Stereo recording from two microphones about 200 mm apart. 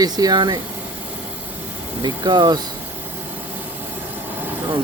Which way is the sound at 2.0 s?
20° right (ahead or behind).